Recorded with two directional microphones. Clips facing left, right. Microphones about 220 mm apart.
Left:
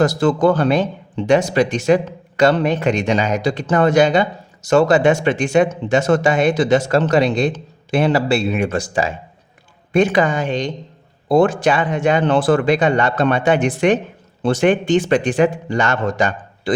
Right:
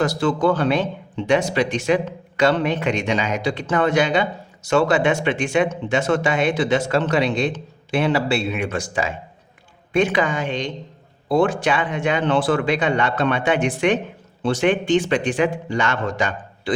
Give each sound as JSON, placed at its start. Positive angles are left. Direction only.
{"t": 0.0, "sound": "speech", "side_deg": 45}